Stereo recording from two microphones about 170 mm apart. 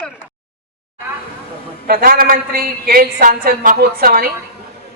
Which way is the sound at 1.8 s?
60° right (ahead or behind).